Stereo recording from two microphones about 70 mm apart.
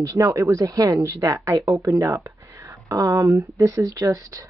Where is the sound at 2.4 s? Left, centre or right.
Right.